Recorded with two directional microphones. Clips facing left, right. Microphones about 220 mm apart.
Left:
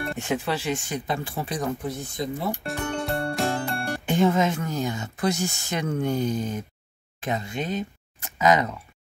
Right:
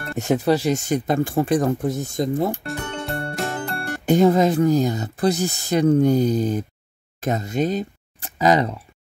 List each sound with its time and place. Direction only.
0.2 s speech: 40° right (ahead or behind)
2.6 s music: centre (ahead or behind)
4.0 s speech: 40° right (ahead or behind)